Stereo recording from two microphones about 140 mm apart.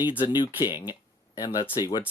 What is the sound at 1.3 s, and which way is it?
Speech, 25° left (ahead or behind).